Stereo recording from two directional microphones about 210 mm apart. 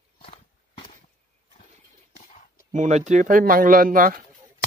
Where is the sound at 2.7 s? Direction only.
35° right (ahead or behind).